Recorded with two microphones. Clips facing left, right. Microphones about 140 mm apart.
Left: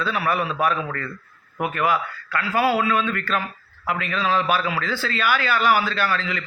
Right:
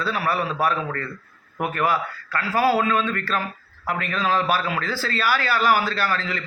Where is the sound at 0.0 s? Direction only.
35° right (ahead or behind).